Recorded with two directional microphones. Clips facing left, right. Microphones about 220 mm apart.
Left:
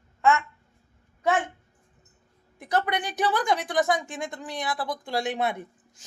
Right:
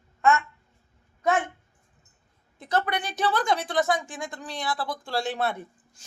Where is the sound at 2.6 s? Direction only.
15° left (ahead or behind).